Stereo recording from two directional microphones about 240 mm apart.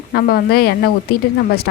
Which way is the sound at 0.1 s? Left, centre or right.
Left.